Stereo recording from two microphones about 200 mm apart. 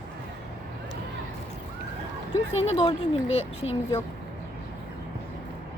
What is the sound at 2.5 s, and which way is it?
Speech, 30° left (ahead or behind).